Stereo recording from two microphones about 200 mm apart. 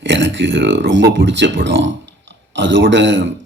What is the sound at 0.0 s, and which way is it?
Speech, 65° right (ahead or behind).